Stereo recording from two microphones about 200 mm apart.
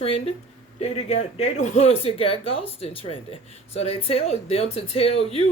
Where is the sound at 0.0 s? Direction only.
30° left (ahead or behind).